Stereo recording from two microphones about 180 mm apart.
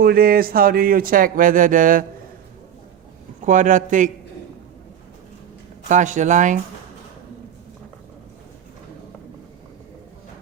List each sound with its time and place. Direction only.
0.0 s speech: 55° right (ahead or behind)
3.4 s speech: 45° right (ahead or behind)
5.9 s speech: 45° right (ahead or behind)